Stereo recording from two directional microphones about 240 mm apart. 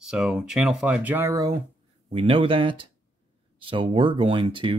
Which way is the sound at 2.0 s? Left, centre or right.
Right.